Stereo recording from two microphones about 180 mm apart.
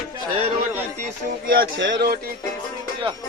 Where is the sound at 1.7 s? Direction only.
85° right.